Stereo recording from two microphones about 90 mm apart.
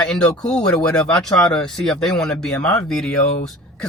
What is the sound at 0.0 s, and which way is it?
A man's voice, 10° left (ahead or behind).